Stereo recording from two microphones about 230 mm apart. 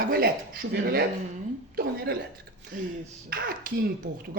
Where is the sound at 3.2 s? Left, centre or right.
Right.